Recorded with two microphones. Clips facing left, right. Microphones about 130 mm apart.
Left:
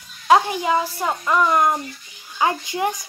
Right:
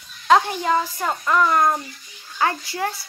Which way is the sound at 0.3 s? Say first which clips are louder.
Left 1 dB; 10° left (ahead or behind).